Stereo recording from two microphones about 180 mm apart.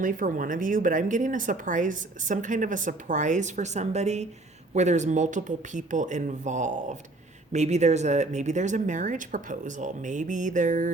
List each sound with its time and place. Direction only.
0.0 s speech: 50° right (ahead or behind)